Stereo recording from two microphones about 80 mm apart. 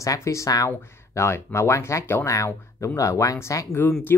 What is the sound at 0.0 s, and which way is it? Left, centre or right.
Speech, left.